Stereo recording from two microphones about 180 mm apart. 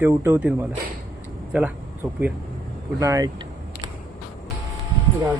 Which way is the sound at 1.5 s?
10° right (ahead or behind).